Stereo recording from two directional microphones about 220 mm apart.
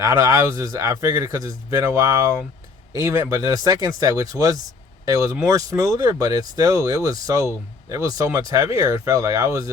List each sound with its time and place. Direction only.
0.0 s a man's voice: 15° right (ahead or behind)